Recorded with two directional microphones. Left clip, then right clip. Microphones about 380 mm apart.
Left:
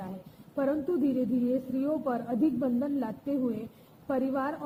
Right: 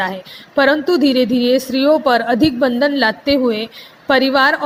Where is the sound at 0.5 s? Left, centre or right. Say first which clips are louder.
Right 17 dB; right.